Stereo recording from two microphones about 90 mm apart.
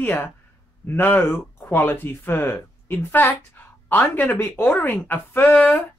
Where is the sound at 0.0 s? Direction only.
20° left (ahead or behind).